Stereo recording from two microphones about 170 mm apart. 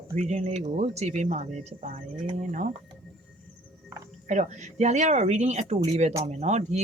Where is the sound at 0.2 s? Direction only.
40° right (ahead or behind).